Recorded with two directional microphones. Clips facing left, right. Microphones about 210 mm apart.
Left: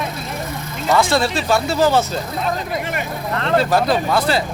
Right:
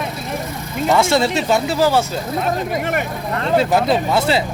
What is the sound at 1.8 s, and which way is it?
Speech, 10° right (ahead or behind).